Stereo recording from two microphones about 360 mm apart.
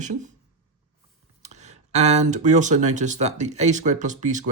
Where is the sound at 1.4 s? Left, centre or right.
Centre.